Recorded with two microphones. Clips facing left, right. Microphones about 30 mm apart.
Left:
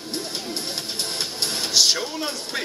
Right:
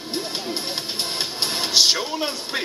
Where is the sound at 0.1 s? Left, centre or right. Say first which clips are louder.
Right 3 dB; right.